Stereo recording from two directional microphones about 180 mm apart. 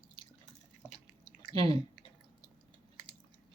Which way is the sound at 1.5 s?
25° left (ahead or behind).